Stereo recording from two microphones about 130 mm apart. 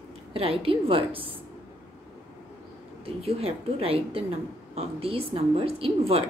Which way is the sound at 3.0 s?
50° right (ahead or behind).